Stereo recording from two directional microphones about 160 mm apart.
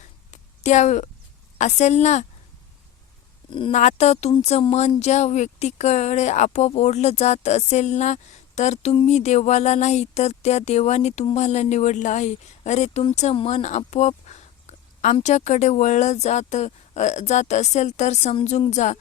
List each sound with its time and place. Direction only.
0.6 s speech: 45° left (ahead or behind)
3.7 s speech: 45° left (ahead or behind)